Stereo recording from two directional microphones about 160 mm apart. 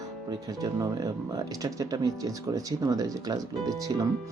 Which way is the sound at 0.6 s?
20° right (ahead or behind).